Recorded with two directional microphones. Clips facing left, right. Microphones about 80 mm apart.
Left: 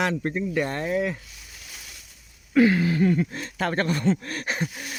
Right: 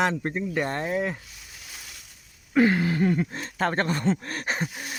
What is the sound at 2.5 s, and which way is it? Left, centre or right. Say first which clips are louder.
Speech: left 2 dB; right.